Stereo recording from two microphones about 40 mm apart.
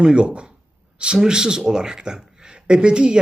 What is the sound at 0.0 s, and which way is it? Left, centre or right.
Speech, right.